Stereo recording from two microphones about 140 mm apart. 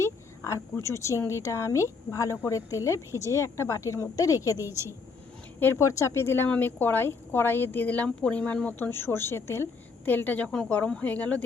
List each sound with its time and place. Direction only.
0.0 s speech: 20° left (ahead or behind)
4.5 s a woman's voice: 20° right (ahead or behind)
5.5 s speech: 15° left (ahead or behind)